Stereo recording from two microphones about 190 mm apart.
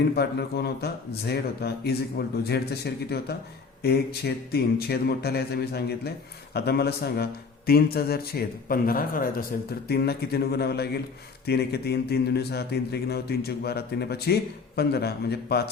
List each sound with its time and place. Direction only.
0.1 s a man's voice: 55° left (ahead or behind)